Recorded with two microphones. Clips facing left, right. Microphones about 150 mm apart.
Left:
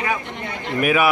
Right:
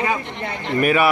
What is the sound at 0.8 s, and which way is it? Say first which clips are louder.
Speech: right 1 dB; 5° left (ahead or behind).